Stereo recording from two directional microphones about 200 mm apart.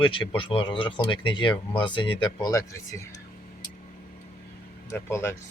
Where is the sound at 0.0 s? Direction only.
25° left (ahead or behind).